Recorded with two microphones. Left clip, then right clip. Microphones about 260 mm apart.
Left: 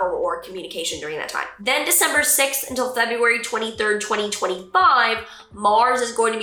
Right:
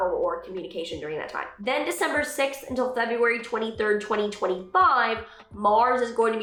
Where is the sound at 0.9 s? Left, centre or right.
Centre.